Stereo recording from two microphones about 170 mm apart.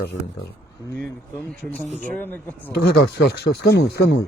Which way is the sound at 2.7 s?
70° left (ahead or behind).